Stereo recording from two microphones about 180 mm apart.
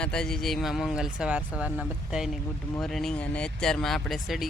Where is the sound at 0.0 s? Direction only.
5° left (ahead or behind).